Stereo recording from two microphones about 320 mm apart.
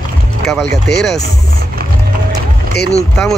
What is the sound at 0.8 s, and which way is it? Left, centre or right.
Speech, left.